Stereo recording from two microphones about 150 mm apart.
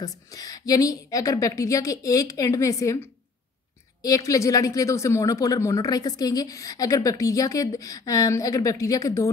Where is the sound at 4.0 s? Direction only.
25° left (ahead or behind).